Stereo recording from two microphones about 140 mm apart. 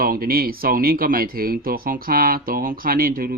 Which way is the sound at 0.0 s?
90° right.